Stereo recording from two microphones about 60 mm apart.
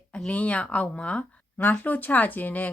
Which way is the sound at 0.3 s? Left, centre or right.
Left.